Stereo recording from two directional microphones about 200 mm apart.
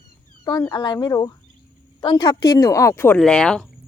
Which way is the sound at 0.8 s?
20° left (ahead or behind).